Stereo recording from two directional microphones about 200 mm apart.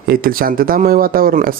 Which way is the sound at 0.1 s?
45° right (ahead or behind).